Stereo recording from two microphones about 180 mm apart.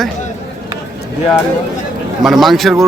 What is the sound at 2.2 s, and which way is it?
Speech, centre (ahead or behind).